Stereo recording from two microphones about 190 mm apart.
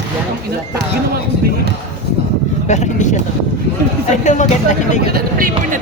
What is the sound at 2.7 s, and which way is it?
Speech, 40° left (ahead or behind).